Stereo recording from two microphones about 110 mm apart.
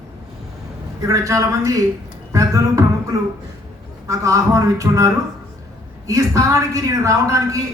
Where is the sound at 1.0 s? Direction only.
30° right (ahead or behind).